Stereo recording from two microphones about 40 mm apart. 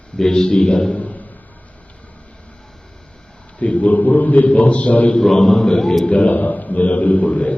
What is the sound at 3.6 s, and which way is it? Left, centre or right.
A man's voice, left.